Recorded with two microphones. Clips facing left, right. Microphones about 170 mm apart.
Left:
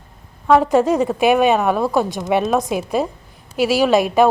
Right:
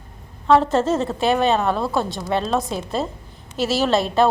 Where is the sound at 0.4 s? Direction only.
10° left (ahead or behind).